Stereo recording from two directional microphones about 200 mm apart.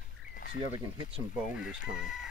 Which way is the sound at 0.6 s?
25° right (ahead or behind).